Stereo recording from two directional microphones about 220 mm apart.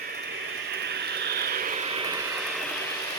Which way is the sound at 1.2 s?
45° right (ahead or behind).